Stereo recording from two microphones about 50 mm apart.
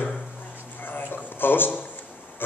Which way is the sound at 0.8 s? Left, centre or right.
Left.